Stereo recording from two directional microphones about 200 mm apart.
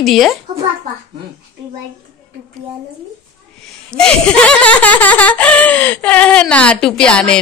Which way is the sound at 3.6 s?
5° left (ahead or behind).